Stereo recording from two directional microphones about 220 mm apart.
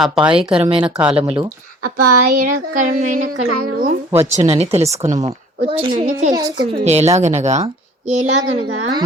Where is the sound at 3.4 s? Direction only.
90° right.